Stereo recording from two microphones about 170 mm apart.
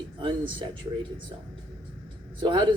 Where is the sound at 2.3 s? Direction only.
30° right (ahead or behind).